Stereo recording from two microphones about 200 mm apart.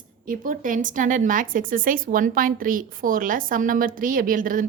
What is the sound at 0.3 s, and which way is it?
A woman's voice, 40° right (ahead or behind).